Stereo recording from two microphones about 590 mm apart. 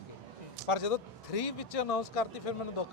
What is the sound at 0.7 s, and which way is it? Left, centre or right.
Speech, left.